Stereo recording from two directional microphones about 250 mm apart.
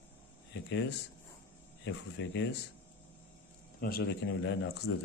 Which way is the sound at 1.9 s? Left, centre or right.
Left.